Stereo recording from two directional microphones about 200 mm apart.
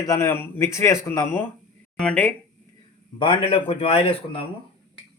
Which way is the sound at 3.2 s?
25° left (ahead or behind).